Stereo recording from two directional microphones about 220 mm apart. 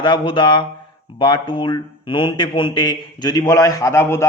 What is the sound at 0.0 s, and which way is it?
A man's voice, 20° left (ahead or behind).